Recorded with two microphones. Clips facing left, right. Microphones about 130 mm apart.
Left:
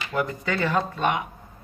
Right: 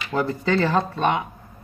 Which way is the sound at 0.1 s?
30° right (ahead or behind).